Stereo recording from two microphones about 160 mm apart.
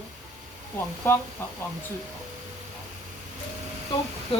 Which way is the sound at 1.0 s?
15° left (ahead or behind).